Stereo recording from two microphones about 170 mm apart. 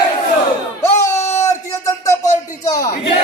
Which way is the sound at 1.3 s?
15° left (ahead or behind).